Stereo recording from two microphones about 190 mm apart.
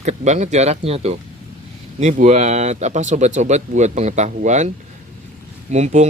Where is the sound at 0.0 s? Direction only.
35° right (ahead or behind).